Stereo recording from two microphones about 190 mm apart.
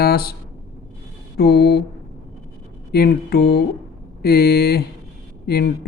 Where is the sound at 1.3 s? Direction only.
55° left (ahead or behind).